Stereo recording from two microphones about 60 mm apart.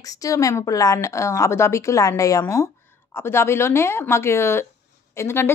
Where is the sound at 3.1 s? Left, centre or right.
Left.